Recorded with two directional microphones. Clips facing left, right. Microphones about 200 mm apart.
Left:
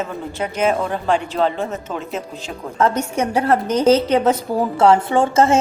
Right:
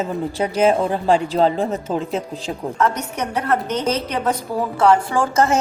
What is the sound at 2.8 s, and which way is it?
A woman's voice, 30° left (ahead or behind).